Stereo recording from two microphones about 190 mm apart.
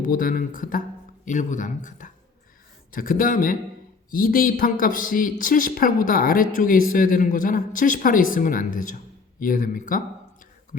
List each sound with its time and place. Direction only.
0.0 s a man's voice: 45° left (ahead or behind)